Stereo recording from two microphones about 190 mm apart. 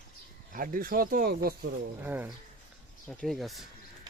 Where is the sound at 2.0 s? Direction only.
10° right (ahead or behind).